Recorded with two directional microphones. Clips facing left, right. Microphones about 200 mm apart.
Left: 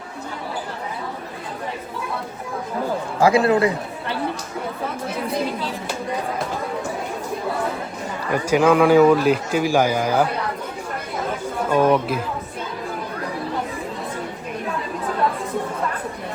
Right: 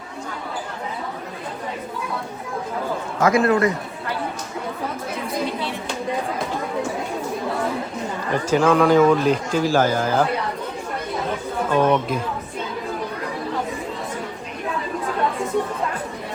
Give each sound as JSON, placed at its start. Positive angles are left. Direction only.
{"t": 3.2, "sound": "a man's voice", "side_deg": 30}
{"t": 8.3, "sound": "speech", "side_deg": 10}
{"t": 11.7, "sound": "speech", "side_deg": 5}